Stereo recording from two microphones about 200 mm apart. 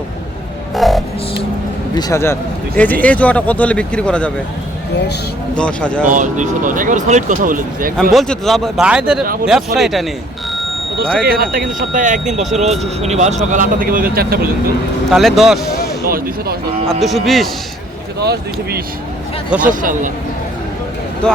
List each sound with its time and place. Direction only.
0.7 s music: centre (ahead or behind)
2.0 s speech: 15° left (ahead or behind)
5.5 s speech: 5° left (ahead or behind)
6.1 s speech: 40° right (ahead or behind)
8.1 s speech: centre (ahead or behind)
11.2 s speech: 50° right (ahead or behind)
15.1 s speech: centre (ahead or behind)
16.0 s speech: 45° right (ahead or behind)
17.0 s speech: centre (ahead or behind)
18.2 s speech: 55° right (ahead or behind)
19.6 s speech: 40° right (ahead or behind)